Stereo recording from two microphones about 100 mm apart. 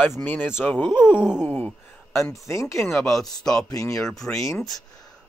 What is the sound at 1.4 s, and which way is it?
Speech, 20° left (ahead or behind).